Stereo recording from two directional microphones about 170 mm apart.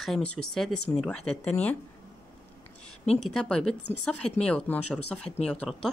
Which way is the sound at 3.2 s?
5° left (ahead or behind).